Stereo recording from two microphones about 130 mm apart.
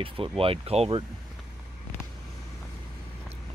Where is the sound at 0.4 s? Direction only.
50° right (ahead or behind).